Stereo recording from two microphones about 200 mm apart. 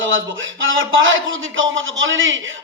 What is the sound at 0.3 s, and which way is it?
Speech, 70° right (ahead or behind).